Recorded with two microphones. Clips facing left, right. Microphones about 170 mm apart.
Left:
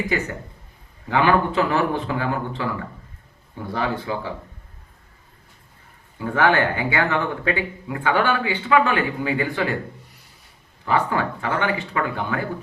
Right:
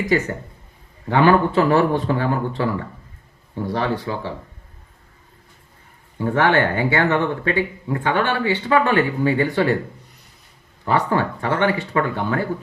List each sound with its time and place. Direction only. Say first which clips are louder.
1.0 s speech: right 3 dB; 35° right (ahead or behind)
3.7 s speech: right 2 dB; 35° right (ahead or behind)
6.1 s speech: right 2 dB; 35° right (ahead or behind)
10.8 s speech: right 2 dB; 35° right (ahead or behind)